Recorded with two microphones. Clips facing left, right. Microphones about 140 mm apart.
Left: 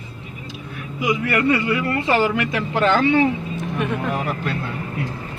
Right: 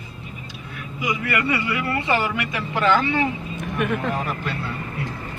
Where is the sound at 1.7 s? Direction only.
70° left (ahead or behind).